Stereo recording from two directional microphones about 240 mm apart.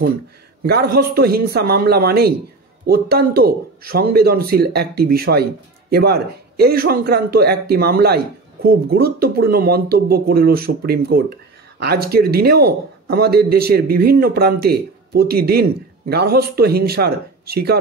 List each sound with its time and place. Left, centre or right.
0.7 s speech: right